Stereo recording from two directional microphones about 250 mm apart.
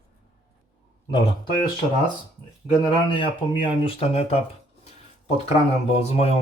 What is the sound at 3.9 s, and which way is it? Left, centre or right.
Speech, left.